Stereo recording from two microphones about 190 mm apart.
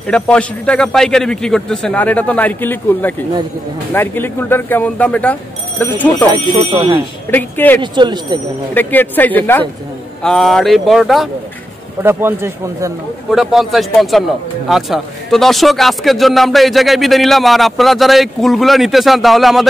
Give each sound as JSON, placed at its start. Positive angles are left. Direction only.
{"t": 0.1, "sound": "speech", "side_deg": 5}
{"t": 7.2, "sound": "speech", "side_deg": 10}
{"t": 7.8, "sound": "speech", "side_deg": -25}
{"t": 8.7, "sound": "speech", "side_deg": 10}
{"t": 12.0, "sound": "a man's voice", "side_deg": -10}
{"t": 13.3, "sound": "speech", "side_deg": 0}